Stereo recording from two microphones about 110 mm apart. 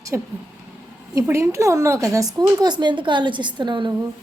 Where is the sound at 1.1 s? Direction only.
25° right (ahead or behind); by 3.9 s 45° right (ahead or behind).